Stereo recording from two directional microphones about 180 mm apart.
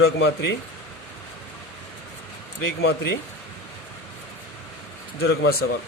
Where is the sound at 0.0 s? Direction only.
70° left (ahead or behind).